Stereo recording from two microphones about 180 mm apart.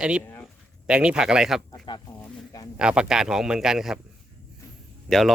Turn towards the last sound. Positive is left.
turn(degrees=0)  # may be behind; listen again after turning